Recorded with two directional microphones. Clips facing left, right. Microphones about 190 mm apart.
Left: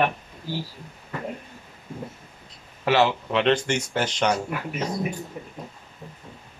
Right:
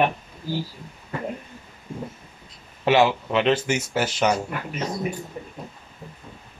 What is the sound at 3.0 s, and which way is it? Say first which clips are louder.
Speech: right 1 dB; 5° right (ahead or behind).